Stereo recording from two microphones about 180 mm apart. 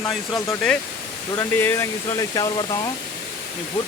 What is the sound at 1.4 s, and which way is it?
Speech, 15° left (ahead or behind).